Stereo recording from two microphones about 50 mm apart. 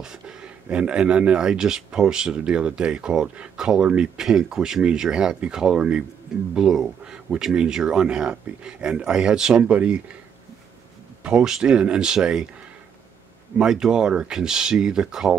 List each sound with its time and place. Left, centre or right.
0.0 s speech: centre
11.2 s speech: centre
13.6 s speech: centre